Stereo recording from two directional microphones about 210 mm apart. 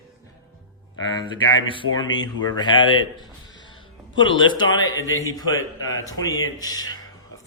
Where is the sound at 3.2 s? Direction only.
20° left (ahead or behind).